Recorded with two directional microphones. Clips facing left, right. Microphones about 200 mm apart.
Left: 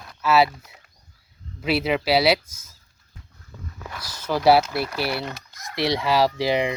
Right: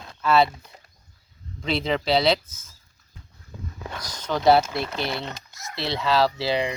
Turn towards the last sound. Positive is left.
turn(degrees=15)  # may be behind; listen again after turning